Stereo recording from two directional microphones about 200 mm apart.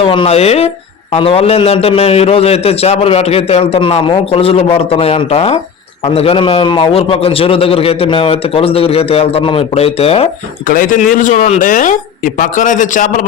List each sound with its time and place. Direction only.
0.0 s a man's voice: 25° left (ahead or behind)
10.7 s speech: 45° left (ahead or behind)